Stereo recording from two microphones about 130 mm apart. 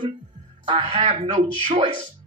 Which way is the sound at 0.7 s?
50° right (ahead or behind).